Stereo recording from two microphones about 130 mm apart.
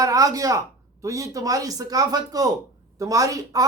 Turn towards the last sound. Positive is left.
turn(degrees=-25)  # may be behind; listen again after turning